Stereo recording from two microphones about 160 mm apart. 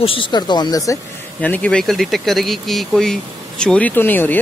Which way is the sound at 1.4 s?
10° left (ahead or behind).